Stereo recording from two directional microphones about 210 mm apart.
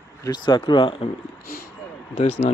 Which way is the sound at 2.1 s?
30° left (ahead or behind).